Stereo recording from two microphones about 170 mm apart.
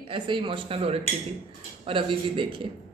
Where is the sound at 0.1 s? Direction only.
30° right (ahead or behind).